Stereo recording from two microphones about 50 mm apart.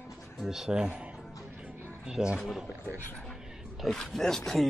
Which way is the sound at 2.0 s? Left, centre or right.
Centre.